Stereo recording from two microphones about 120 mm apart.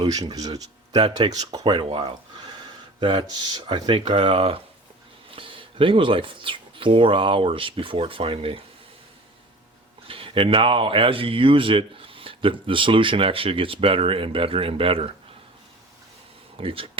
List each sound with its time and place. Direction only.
0.0 s speech: 35° right (ahead or behind); by 8.6 s 50° right (ahead or behind)
10.1 s speech: 50° right (ahead or behind)
16.6 s speech: 50° right (ahead or behind)